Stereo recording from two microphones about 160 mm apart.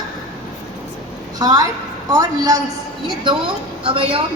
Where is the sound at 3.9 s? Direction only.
35° right (ahead or behind).